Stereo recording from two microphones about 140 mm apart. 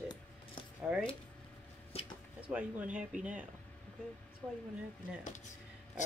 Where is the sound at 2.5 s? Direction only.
10° right (ahead or behind).